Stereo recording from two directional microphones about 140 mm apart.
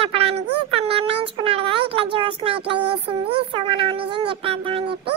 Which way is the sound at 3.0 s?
35° right (ahead or behind).